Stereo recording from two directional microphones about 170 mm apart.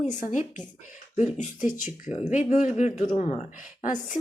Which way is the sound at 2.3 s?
45° left (ahead or behind).